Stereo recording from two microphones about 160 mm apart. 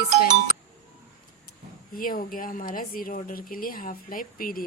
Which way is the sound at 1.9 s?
60° left (ahead or behind).